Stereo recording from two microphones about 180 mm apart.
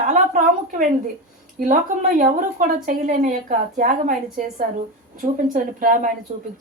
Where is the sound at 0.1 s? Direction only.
45° right (ahead or behind).